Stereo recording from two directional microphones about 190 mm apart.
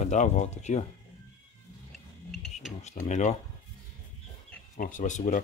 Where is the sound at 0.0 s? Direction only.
40° left (ahead or behind).